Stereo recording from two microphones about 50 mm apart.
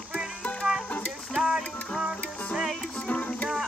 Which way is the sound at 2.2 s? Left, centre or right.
Left.